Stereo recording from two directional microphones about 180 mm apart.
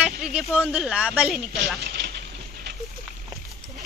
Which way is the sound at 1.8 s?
65° right (ahead or behind).